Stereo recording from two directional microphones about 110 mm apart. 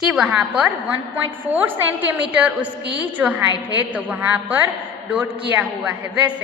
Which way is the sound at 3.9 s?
15° right (ahead or behind).